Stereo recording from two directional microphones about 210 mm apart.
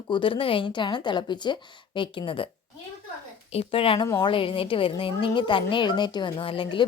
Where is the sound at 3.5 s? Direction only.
25° left (ahead or behind).